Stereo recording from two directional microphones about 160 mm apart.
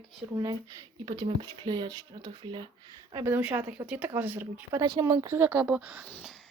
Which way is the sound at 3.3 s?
10° right (ahead or behind).